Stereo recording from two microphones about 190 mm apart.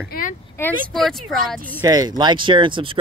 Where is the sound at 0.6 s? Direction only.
15° left (ahead or behind).